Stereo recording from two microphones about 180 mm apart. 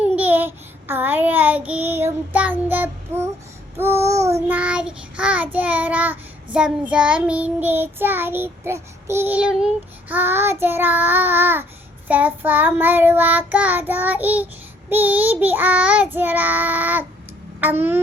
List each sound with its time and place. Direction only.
0.0 s child singing: 10° right (ahead or behind)